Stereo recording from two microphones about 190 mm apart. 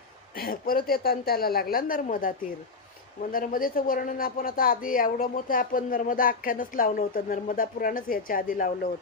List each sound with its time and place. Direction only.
0.4 s speech: 50° left (ahead or behind)